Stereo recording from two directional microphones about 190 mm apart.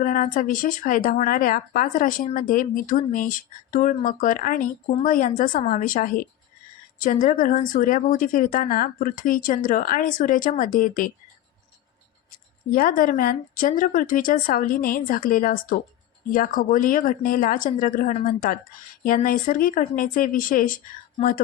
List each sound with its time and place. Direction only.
0.0 s speech: 45° left (ahead or behind)
12.7 s speech: 50° left (ahead or behind)